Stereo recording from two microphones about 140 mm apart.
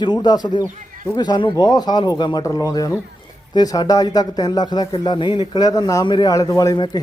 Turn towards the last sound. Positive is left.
turn(degrees=30)  # may be behind; listen again after turning